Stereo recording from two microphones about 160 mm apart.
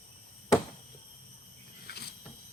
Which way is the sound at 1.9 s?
80° left.